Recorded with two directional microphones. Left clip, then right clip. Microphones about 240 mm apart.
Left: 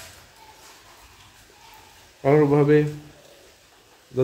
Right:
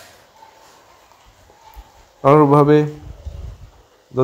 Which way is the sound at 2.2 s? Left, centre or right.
Centre.